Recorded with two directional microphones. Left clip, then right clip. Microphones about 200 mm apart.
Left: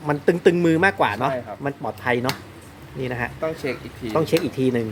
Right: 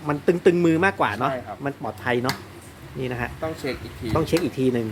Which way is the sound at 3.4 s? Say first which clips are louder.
Left 3 dB; 25° left (ahead or behind).